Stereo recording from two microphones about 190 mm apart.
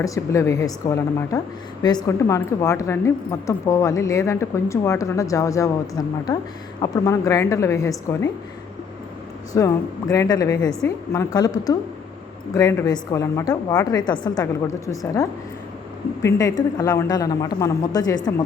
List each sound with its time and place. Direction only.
0.0 s a woman's voice: 15° left (ahead or behind)
9.5 s a woman's voice: 20° left (ahead or behind)